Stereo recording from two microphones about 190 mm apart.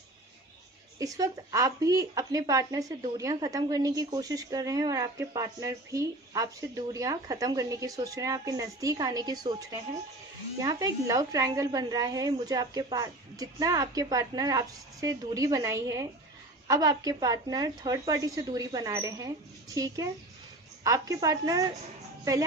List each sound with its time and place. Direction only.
0.9 s speech: 20° right (ahead or behind)